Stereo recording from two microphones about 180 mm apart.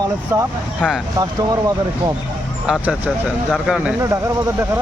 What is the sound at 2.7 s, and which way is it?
Speech, 5° right (ahead or behind).